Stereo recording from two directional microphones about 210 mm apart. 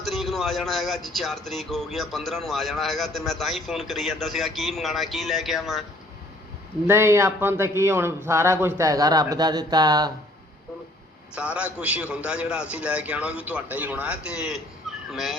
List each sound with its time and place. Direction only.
0.0 s speech: centre (ahead or behind)
6.8 s speech: 10° right (ahead or behind)
11.3 s speech: 5° right (ahead or behind)